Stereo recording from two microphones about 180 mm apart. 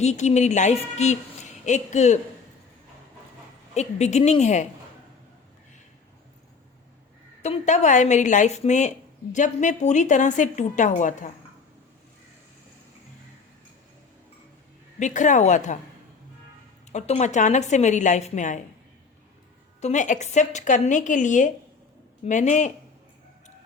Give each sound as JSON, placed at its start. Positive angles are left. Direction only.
{"t": 0.0, "sound": "a woman's voice", "side_deg": 40}
{"t": 3.8, "sound": "a woman's voice", "side_deg": 40}
{"t": 7.4, "sound": "a woman's voice", "side_deg": 40}
{"t": 14.9, "sound": "a woman's voice", "side_deg": 40}
{"t": 16.9, "sound": "a woman's voice", "side_deg": 40}
{"t": 19.8, "sound": "a woman's voice", "side_deg": 40}